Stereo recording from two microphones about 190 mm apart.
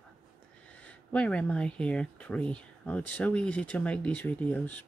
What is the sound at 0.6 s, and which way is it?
Speech, 5° left (ahead or behind).